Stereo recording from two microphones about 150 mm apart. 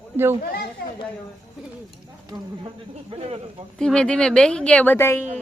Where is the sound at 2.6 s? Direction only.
35° right (ahead or behind).